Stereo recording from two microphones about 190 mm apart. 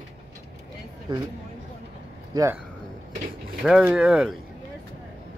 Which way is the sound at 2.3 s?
15° right (ahead or behind).